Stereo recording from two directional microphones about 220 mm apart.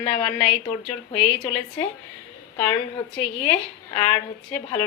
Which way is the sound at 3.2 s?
25° left (ahead or behind).